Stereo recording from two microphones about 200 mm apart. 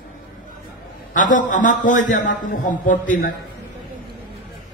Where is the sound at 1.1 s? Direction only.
40° left (ahead or behind).